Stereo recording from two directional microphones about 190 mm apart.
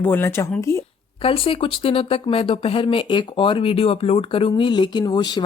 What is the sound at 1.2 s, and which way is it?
Speech, 30° left (ahead or behind).